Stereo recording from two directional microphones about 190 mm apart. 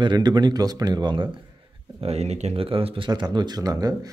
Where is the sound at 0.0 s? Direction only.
25° right (ahead or behind).